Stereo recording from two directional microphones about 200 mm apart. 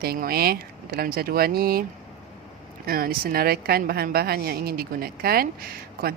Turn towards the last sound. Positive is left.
turn(degrees=-50)  # may be behind; listen again after turning